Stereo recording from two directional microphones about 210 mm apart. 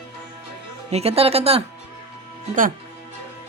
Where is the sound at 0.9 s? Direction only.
30° right (ahead or behind).